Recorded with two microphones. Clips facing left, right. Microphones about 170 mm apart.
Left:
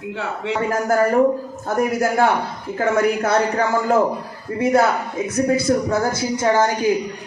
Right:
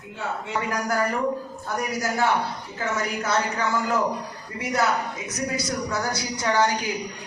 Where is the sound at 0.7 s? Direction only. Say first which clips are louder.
Left 9 dB; 45° left (ahead or behind).